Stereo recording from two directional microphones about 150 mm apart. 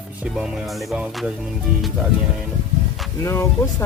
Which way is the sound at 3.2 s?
20° left (ahead or behind).